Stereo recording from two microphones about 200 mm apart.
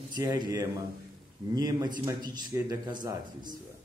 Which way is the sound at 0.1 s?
20° right (ahead or behind).